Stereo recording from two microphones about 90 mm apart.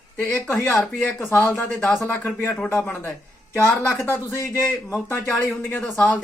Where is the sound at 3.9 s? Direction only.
30° left (ahead or behind).